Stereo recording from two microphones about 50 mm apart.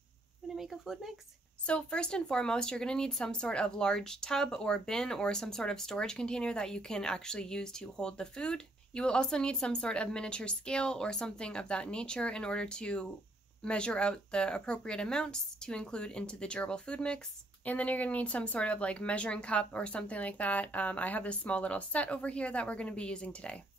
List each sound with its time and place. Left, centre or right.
0.6 s speech: centre
1.7 s speech: centre
17.6 s speech: left